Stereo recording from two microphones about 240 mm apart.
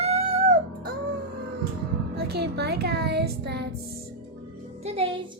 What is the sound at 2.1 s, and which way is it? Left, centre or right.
Music, right.